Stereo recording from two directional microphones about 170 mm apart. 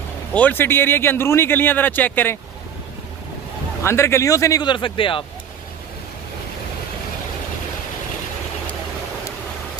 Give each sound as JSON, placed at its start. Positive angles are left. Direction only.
{"t": 0.3, "sound": "speech", "side_deg": 10}
{"t": 3.8, "sound": "a man's voice", "side_deg": 15}